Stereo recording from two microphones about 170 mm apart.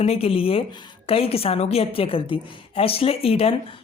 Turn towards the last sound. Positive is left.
turn(degrees=35)  # may be behind; listen again after turning